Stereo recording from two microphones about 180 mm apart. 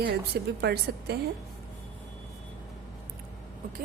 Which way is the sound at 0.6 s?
65° right (ahead or behind).